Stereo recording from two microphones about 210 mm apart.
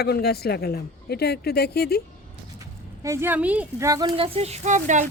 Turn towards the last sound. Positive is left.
turn(degrees=-35)  # may be behind; listen again after turning